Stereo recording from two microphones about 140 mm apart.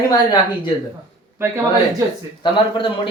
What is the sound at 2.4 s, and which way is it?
Speech, 35° left (ahead or behind).